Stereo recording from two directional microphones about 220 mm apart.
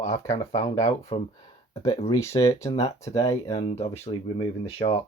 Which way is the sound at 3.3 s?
30° left (ahead or behind).